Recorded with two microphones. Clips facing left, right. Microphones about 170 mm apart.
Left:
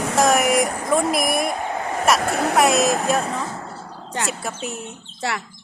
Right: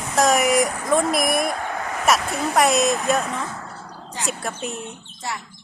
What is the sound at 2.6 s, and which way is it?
Speech, centre (ahead or behind).